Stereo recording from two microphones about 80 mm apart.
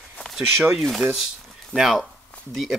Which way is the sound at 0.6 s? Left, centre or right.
Centre.